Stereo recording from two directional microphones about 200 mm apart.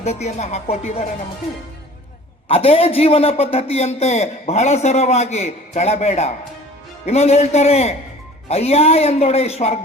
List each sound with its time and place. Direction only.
0.0 s a man's voice: 35° left (ahead or behind)
2.5 s a man's voice: 30° left (ahead or behind)